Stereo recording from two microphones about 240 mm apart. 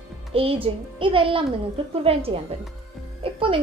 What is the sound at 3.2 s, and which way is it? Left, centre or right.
Music, right.